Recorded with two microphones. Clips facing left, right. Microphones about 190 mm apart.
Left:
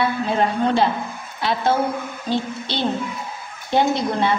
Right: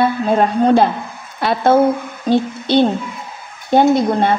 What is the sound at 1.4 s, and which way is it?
Speech, 55° right (ahead or behind).